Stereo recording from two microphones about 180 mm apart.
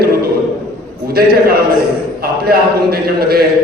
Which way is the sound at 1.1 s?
60° right (ahead or behind).